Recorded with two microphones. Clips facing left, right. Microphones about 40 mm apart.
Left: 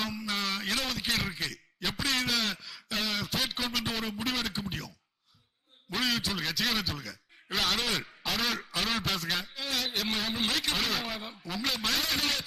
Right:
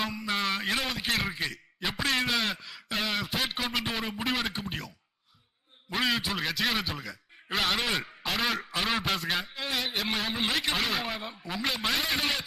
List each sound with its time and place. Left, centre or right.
0.0 s a sound: centre
1.1 s a man's voice: centre
5.9 s a man's voice: centre